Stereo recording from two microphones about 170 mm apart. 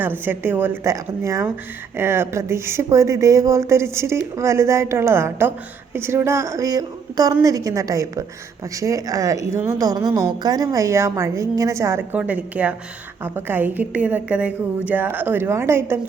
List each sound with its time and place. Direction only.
0.0 s a woman's voice: 10° right (ahead or behind)